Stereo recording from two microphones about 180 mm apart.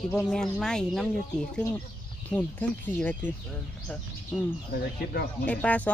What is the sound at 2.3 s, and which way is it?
Speech, 10° left (ahead or behind).